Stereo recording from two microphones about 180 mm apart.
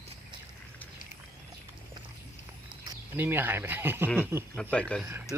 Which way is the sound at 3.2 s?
10° right (ahead or behind).